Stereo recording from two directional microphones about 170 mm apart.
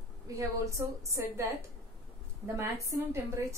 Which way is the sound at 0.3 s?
20° right (ahead or behind).